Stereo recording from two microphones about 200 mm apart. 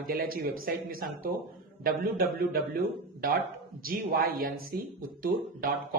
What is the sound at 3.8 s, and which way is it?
Speech, 45° right (ahead or behind).